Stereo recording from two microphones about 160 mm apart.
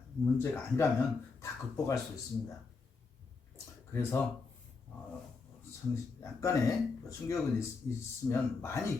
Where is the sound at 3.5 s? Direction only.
15° left (ahead or behind).